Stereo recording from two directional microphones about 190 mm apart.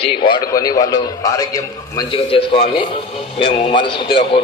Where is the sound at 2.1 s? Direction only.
30° left (ahead or behind).